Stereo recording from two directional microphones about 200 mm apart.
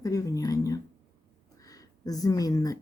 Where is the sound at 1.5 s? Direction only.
15° left (ahead or behind).